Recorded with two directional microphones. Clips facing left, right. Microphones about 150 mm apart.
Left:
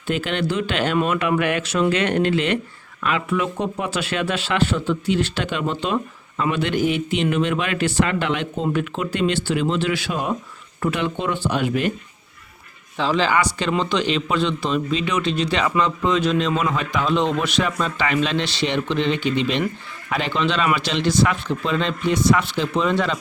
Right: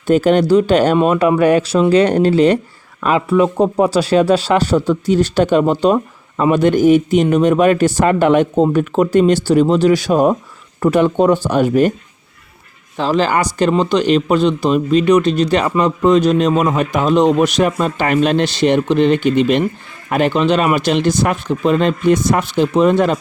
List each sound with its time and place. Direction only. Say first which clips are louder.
0.1 s speech: right 12 dB; 40° right (ahead or behind)
13.0 s speech: right 4 dB; 45° right (ahead or behind)